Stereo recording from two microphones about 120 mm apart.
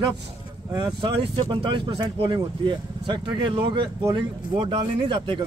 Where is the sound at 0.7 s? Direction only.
35° right (ahead or behind).